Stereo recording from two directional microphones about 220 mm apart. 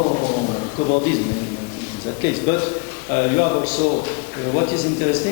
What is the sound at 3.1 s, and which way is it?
Speech, 15° left (ahead or behind).